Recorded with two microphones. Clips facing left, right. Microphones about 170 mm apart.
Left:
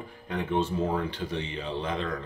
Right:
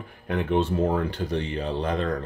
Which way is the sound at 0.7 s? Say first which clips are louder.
Right 4 dB; 50° right (ahead or behind).